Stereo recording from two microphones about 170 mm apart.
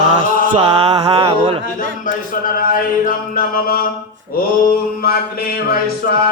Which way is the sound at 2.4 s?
55° left (ahead or behind).